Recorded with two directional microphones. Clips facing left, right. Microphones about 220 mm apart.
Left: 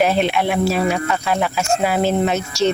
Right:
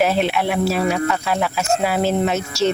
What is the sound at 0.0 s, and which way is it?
Speech, 5° right (ahead or behind).